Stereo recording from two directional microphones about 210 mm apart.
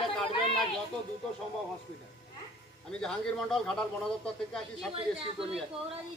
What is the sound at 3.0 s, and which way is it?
A man's voice, centre (ahead or behind).